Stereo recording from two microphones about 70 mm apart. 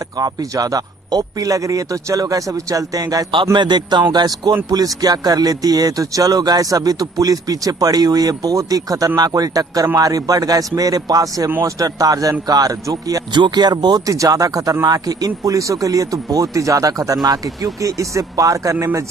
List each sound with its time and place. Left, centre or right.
0.2 s speech: right
3.5 s a man's voice: right
4.6 s speech: right
14.0 s speech: right